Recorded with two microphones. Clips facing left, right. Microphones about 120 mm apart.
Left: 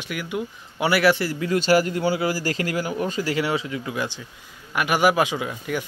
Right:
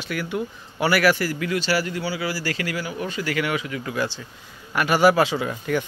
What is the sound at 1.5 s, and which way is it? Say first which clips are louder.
Speech: left 8 dB; 45° left (ahead or behind).